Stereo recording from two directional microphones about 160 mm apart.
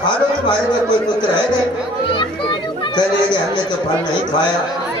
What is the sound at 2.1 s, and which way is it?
Children playing, 30° left (ahead or behind).